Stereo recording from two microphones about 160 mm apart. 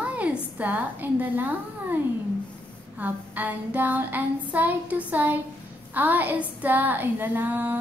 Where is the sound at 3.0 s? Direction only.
10° right (ahead or behind).